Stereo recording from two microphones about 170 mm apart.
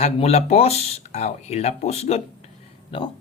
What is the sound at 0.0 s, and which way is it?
Speech, 40° left (ahead or behind).